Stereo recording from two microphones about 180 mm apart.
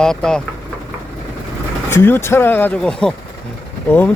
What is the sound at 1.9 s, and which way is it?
Speech, 15° left (ahead or behind).